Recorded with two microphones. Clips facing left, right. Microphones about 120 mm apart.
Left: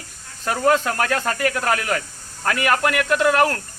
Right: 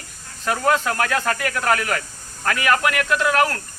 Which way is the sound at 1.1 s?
35° left (ahead or behind).